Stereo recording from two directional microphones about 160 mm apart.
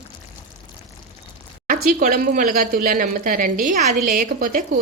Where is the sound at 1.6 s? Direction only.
60° right (ahead or behind).